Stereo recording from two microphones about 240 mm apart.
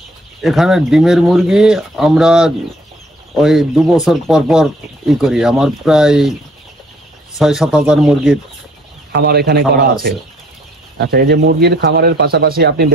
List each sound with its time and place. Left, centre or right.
0.4 s speech: centre
7.3 s speech: centre
9.1 s speech: right
11.0 s speech: right